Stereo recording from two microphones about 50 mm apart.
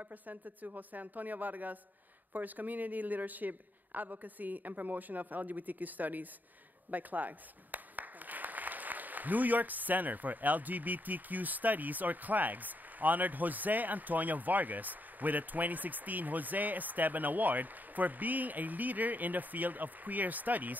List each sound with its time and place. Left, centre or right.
0.0 s speech: right